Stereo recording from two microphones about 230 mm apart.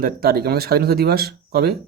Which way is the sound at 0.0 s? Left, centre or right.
Right.